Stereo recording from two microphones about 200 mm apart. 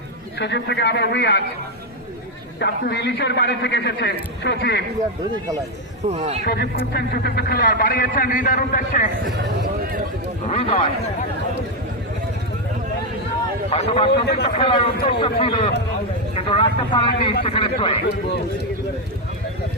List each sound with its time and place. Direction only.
0.3 s a man's voice: 60° left (ahead or behind)
2.6 s a man's voice: 55° left (ahead or behind)
6.1 s a man's voice: 30° right (ahead or behind)
6.4 s a man's voice: 50° left (ahead or behind)
9.4 s a sound: 50° right (ahead or behind)
10.5 s a man's voice: 30° left (ahead or behind)
13.7 s a man's voice: 30° left (ahead or behind)